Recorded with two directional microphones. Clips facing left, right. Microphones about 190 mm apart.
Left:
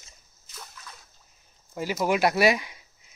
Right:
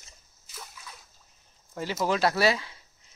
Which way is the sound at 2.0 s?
15° left (ahead or behind).